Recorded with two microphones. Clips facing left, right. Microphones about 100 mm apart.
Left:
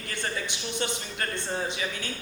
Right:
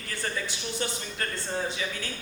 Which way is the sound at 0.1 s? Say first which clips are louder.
Even; 20° left (ahead or behind).